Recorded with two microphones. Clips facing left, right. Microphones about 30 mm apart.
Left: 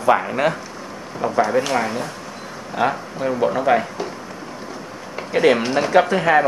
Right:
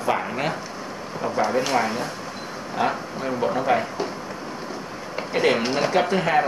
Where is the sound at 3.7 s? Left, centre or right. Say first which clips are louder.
Left 3 dB; left.